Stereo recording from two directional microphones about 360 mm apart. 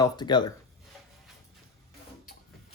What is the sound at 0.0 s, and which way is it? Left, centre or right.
Speech, centre.